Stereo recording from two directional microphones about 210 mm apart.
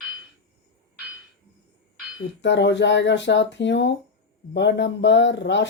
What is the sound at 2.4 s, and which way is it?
Speech, 55° left (ahead or behind).